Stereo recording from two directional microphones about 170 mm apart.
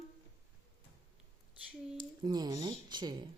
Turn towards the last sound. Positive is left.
turn(degrees=-25)  # may be behind; listen again after turning